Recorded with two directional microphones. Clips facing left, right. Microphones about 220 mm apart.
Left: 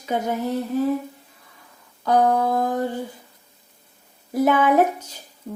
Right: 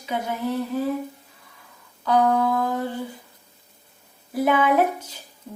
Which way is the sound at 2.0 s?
45° left (ahead or behind).